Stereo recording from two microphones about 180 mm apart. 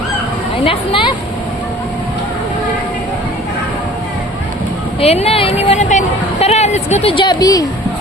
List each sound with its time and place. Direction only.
0.6 s speech: 30° left (ahead or behind)
4.9 s a woman's voice: 35° left (ahead or behind)